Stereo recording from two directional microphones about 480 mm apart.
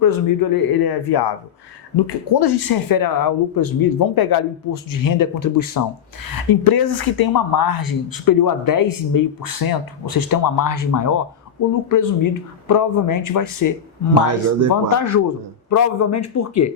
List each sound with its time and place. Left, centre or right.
0.0 s speech: left
14.3 s speech: right
14.9 s speech: left